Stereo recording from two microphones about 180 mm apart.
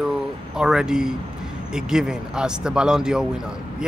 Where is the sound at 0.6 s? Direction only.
5° right (ahead or behind).